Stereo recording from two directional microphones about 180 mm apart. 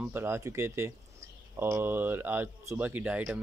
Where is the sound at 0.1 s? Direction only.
15° right (ahead or behind).